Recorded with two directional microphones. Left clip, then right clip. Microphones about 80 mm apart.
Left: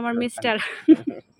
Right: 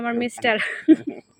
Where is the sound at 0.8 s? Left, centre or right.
Left.